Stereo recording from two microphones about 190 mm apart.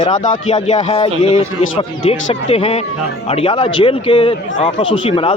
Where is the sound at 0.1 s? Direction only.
35° left (ahead or behind).